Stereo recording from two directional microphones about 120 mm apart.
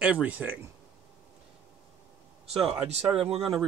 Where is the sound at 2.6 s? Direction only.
10° right (ahead or behind).